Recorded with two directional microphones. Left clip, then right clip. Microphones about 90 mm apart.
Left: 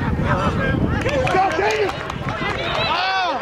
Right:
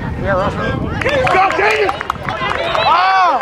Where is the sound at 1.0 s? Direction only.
35° right (ahead or behind).